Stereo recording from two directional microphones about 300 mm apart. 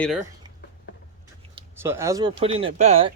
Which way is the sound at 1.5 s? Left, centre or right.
Centre.